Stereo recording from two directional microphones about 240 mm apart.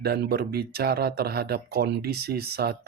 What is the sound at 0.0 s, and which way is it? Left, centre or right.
Speech, right.